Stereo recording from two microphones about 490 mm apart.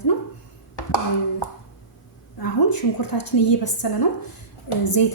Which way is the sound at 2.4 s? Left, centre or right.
Left.